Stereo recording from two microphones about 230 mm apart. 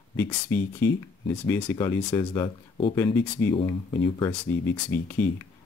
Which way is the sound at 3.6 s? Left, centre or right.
Centre.